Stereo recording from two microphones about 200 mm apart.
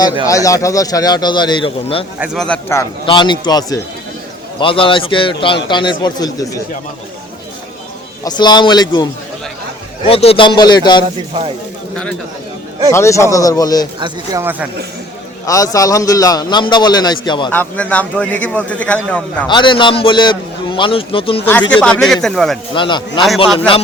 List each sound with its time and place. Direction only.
0.3 s a man's voice: 15° left (ahead or behind)
2.1 s speech: 5° right (ahead or behind)
3.1 s a man's voice: 25° left (ahead or behind)
8.2 s a man's voice: 20° left (ahead or behind)
10.1 s a man's voice: 30° left (ahead or behind)
12.9 s speech: 15° left (ahead or behind)
14.0 s speech: 15° right (ahead or behind)
15.4 s a man's voice: 15° left (ahead or behind)
17.5 s speech: 10° left (ahead or behind)
19.5 s a man's voice: 25° left (ahead or behind)
21.7 s speech: 5° left (ahead or behind)
22.7 s a man's voice: 25° left (ahead or behind)